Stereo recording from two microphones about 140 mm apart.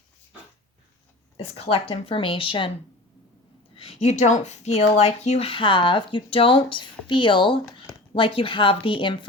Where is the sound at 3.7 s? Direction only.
45° left (ahead or behind).